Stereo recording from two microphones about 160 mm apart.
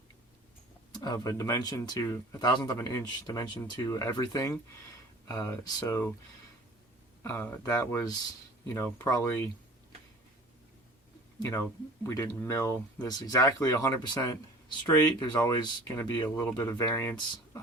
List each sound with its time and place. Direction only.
0.9 s speech: 25° left (ahead or behind)
7.2 s speech: 15° left (ahead or behind)
11.3 s speech: 20° left (ahead or behind)